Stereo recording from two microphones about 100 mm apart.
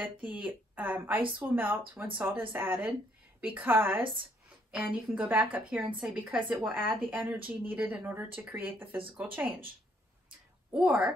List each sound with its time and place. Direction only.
0.2 s a woman's voice: 15° right (ahead or behind)
4.6 s speech: 10° right (ahead or behind)
6.7 s a woman's voice: 20° right (ahead or behind)
10.7 s speech: 10° right (ahead or behind)